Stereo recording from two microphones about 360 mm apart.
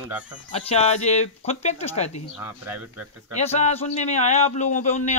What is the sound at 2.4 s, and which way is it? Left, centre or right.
Speech, centre.